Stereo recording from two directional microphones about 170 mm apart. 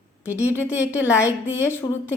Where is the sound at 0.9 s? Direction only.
15° left (ahead or behind).